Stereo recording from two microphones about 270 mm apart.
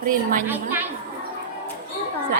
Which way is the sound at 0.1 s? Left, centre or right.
Right.